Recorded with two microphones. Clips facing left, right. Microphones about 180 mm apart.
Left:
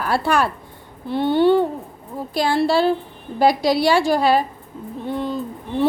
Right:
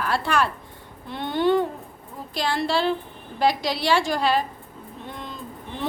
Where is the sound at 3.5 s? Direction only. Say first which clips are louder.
Left 6 dB; 10° left (ahead or behind).